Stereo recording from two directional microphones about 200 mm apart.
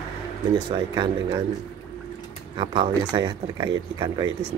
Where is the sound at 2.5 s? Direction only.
25° right (ahead or behind).